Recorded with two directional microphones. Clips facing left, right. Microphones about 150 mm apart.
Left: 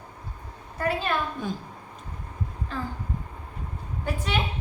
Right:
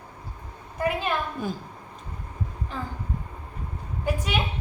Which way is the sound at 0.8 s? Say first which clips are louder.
Right 1 dB; 15° right (ahead or behind).